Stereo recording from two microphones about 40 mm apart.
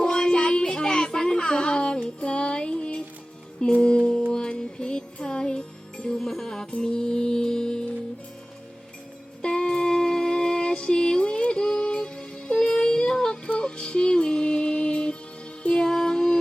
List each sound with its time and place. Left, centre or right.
0.0 s music: centre
6.1 s music: centre
6.7 s music: left
9.4 s music: centre
12.7 s child singing: centre
13.6 s music: left